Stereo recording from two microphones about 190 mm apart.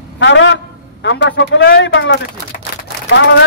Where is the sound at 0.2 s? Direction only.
70° left (ahead or behind).